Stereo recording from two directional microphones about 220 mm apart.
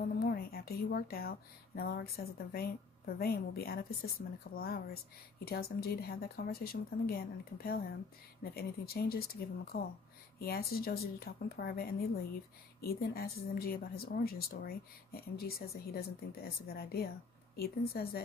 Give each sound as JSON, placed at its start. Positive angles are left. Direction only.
{"t": 0.2, "sound": "speech", "side_deg": 45}